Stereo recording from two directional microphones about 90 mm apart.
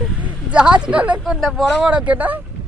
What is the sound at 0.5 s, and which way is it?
Speech, 10° right (ahead or behind).